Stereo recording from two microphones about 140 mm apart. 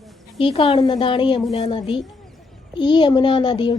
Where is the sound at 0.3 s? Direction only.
40° left (ahead or behind).